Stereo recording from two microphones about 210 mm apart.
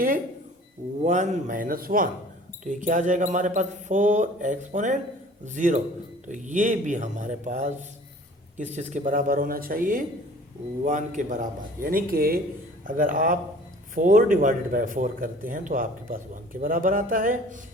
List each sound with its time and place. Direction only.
1.0 s speech: 35° right (ahead or behind)